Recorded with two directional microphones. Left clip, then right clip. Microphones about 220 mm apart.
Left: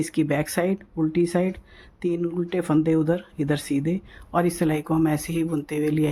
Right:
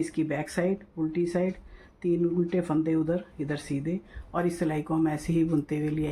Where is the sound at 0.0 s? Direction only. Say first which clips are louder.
Left 5 dB; 50° left (ahead or behind).